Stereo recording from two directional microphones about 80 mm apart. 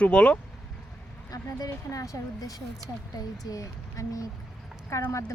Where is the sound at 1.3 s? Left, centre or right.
Left.